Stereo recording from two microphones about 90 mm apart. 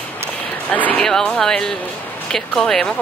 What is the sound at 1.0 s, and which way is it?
Speech, 5° left (ahead or behind).